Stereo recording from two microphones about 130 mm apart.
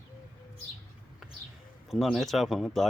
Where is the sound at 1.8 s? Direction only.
Centre (ahead or behind).